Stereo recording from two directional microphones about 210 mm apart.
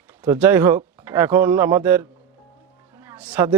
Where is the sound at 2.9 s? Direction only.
10° right (ahead or behind).